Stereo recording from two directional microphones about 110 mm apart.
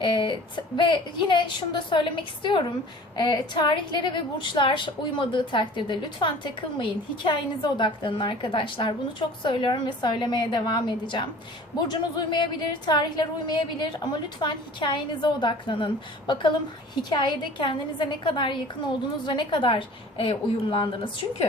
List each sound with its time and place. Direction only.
0.0 s a woman's voice: 50° left (ahead or behind)